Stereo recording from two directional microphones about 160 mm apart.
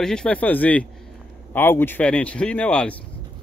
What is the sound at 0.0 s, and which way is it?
Speech, 5° left (ahead or behind).